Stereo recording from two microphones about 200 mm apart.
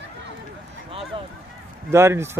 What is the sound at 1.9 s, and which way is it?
Speech, 10° right (ahead or behind).